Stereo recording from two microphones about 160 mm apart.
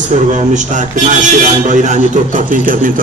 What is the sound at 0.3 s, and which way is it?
A man's voice, 50° right (ahead or behind).